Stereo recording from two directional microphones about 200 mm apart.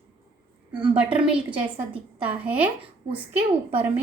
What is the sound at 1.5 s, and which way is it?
Speech, 25° right (ahead or behind).